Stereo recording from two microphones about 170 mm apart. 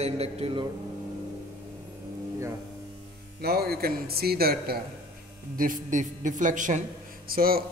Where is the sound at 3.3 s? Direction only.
65° right (ahead or behind).